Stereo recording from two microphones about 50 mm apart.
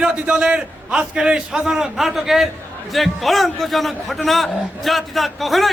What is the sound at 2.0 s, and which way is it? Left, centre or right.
A man's voice, centre.